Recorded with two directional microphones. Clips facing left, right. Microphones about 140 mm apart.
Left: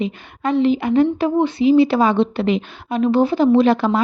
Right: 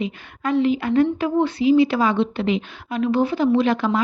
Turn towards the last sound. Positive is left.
turn(degrees=30)  # may be behind; listen again after turning